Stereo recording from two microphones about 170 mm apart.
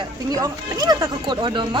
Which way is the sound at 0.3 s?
20° right (ahead or behind).